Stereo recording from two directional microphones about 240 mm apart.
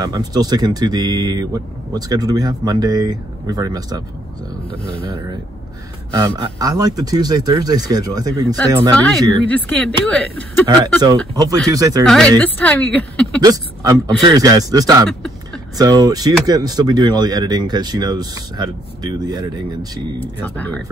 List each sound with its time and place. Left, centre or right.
0.0 s speech: centre
6.1 s speech: centre
9.5 s speech: centre
11.3 s speech: centre
12.4 s speech: centre
13.4 s speech: centre
15.0 s a sound: centre
15.8 s speech: centre
20.2 s speech: centre